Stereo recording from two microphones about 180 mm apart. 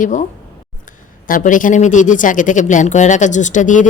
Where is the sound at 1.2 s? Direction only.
50° left (ahead or behind).